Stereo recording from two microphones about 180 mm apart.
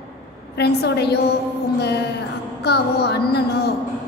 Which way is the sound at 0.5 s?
65° left (ahead or behind).